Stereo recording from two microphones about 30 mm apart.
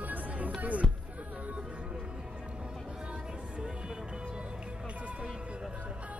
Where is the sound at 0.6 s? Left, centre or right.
Right.